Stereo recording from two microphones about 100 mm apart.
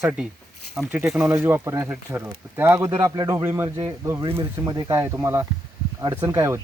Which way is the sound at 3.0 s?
35° right (ahead or behind).